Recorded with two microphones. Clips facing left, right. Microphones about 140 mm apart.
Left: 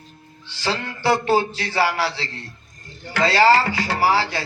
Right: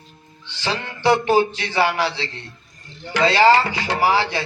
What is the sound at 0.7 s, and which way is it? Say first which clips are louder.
Speech: right 2 dB; 20° right (ahead or behind).